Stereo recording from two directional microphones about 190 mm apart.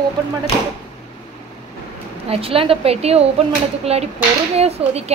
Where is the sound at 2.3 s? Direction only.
30° right (ahead or behind).